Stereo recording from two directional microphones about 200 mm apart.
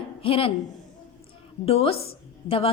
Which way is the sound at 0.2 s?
25° left (ahead or behind).